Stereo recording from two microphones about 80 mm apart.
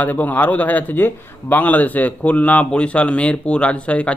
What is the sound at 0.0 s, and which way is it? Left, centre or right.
A man's voice, left.